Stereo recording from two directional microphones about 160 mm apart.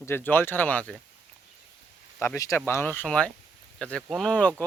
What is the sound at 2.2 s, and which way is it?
Speech, 20° left (ahead or behind).